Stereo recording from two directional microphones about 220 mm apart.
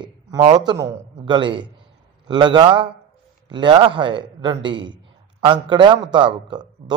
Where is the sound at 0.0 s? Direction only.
25° right (ahead or behind).